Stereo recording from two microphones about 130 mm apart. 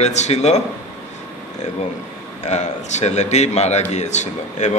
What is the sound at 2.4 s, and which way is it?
Speech, 60° left (ahead or behind).